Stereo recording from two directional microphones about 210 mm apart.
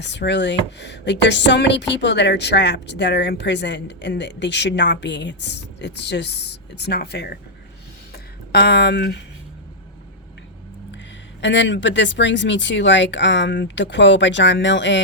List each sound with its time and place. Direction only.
0.0 s a woman's voice: 55° left (ahead or behind)
10.9 s a woman's voice: 55° left (ahead or behind)